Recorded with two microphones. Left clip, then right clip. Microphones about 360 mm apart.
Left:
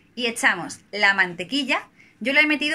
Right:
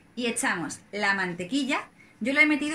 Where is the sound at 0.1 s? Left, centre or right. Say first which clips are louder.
Left 7 dB; left.